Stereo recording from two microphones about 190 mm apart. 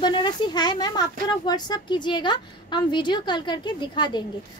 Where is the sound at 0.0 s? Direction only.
25° left (ahead or behind).